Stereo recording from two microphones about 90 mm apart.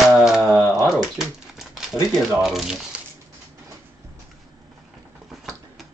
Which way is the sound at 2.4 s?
5° right (ahead or behind).